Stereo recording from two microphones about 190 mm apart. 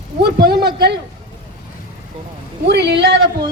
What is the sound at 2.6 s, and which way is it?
Speech, 60° right (ahead or behind).